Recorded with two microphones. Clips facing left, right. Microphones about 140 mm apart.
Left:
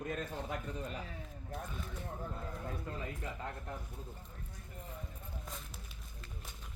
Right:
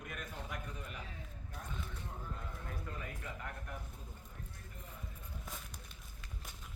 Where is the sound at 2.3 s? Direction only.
25° left (ahead or behind).